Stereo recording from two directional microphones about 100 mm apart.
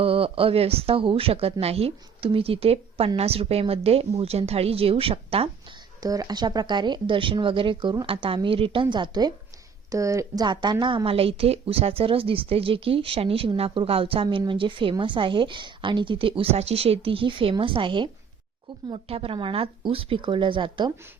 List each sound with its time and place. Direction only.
0.0 s a woman's voice: 70° right (ahead or behind)
6.0 s a woman's voice: 40° right (ahead or behind)
9.9 s a woman's voice: 35° right (ahead or behind)
10.4 s a woman's voice: 50° right (ahead or behind)
18.9 s a woman's voice: 70° right (ahead or behind); by 20.9 s 55° right (ahead or behind)